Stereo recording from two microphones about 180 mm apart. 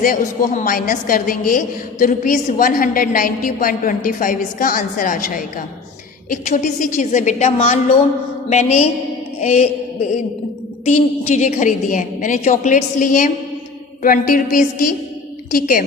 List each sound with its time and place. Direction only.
0.0 s a woman's voice: 45° left (ahead or behind)
8.4 s mantra: 40° left (ahead or behind)
10.8 s a woman's voice: 35° left (ahead or behind)